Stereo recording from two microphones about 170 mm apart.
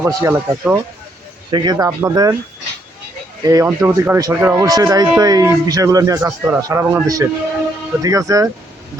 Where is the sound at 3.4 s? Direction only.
20° right (ahead or behind).